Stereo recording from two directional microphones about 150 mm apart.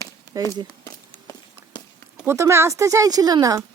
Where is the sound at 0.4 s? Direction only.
25° right (ahead or behind).